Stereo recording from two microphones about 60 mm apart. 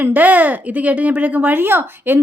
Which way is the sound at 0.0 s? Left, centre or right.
Right.